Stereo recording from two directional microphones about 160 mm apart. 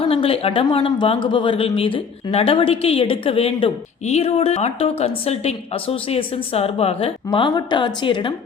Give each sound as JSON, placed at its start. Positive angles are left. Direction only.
{"t": 0.0, "sound": "a woman's voice", "side_deg": 35}